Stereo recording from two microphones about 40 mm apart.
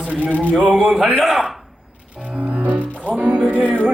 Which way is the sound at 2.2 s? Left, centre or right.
Right.